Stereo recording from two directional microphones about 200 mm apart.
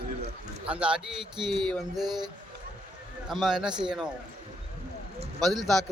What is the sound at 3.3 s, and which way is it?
Speech, centre (ahead or behind).